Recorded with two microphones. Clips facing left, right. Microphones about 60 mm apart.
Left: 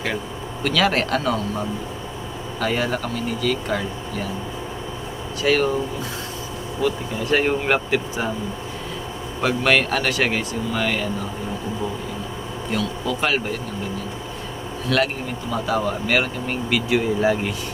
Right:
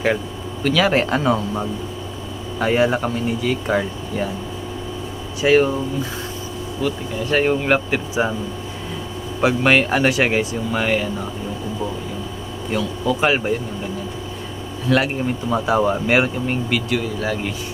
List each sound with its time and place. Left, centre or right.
0.6 s speech: centre
1.1 s speech: right
5.4 s speech: centre
6.8 s speech: centre
9.4 s speech: centre
12.7 s speech: centre
14.8 s speech: centre
15.4 s speech: right
16.9 s speech: centre